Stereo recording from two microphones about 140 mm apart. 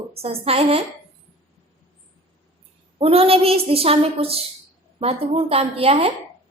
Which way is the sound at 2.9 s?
40° right (ahead or behind).